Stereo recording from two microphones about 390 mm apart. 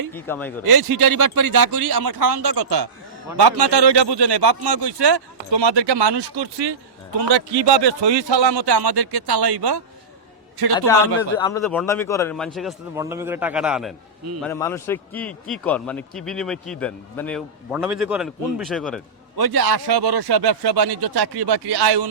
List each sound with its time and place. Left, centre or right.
0.1 s a man's voice: centre
0.8 s speech: right
7.7 s speech: right
10.8 s a man's voice: centre
19.4 s speech: right